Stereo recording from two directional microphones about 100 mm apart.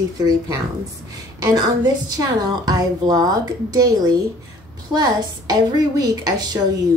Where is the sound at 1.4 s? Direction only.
40° right (ahead or behind).